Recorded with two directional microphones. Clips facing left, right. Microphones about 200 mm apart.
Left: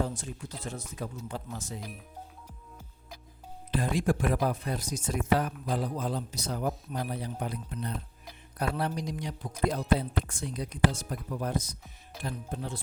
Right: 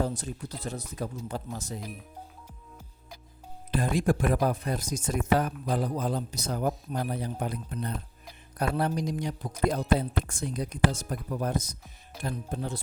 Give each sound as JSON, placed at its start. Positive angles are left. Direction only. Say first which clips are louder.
{"t": 0.0, "sound": "speech", "louder": "right 3 dB", "side_deg": -35}
{"t": 3.7, "sound": "speech", "louder": "right 2 dB", "side_deg": -45}